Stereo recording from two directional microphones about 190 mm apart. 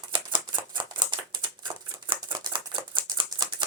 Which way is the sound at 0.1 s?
25° right (ahead or behind).